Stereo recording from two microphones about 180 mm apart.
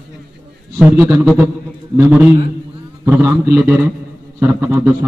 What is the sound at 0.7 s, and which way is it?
A man's voice, 10° right (ahead or behind).